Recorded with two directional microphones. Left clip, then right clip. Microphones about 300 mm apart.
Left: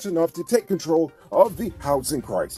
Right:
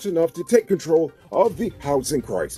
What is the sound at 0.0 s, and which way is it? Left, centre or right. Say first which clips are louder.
Speech: right 2 dB; centre.